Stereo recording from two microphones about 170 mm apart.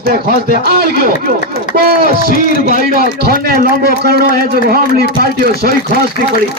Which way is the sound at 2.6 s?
60° right (ahead or behind).